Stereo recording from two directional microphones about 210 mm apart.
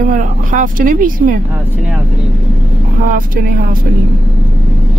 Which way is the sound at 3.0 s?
40° right (ahead or behind).